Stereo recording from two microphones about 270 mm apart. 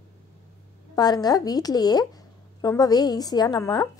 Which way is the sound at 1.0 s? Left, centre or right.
Centre.